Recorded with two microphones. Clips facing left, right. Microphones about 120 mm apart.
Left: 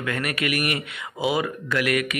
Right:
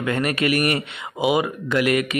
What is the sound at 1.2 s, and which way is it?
Speech, 20° right (ahead or behind).